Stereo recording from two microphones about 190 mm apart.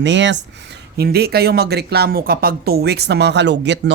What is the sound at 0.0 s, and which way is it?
Speech, 70° right (ahead or behind).